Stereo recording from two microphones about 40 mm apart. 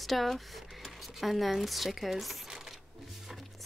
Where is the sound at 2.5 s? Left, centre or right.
Centre.